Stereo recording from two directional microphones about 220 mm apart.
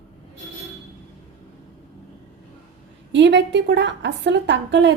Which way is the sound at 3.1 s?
55° right (ahead or behind).